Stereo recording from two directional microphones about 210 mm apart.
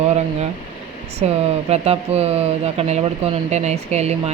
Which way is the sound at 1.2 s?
30° right (ahead or behind).